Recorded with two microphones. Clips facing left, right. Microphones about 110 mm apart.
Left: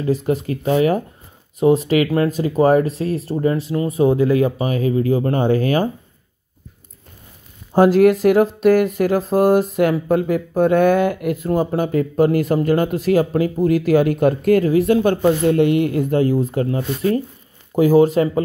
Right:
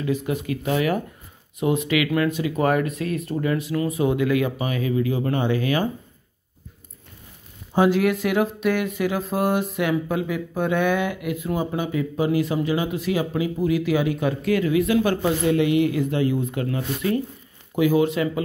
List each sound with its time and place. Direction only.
0.0 s speech: 35° left (ahead or behind)
7.7 s speech: 45° left (ahead or behind)